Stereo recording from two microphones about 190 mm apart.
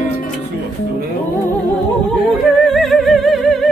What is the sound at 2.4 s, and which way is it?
Music, centre (ahead or behind).